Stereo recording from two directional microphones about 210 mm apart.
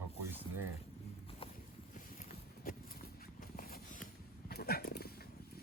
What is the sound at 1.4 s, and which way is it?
Walk, 25° left (ahead or behind).